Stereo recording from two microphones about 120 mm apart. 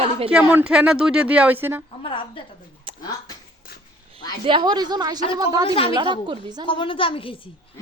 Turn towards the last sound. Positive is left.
turn(degrees=45)  # may be behind; listen again after turning